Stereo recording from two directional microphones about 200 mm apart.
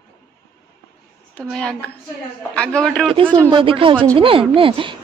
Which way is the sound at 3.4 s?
25° right (ahead or behind).